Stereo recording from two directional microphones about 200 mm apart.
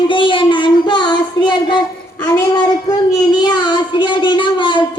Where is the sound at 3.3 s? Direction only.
20° left (ahead or behind).